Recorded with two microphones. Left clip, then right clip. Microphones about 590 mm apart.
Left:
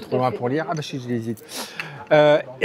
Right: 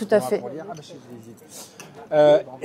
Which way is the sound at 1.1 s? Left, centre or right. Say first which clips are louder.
Left 14 dB; left.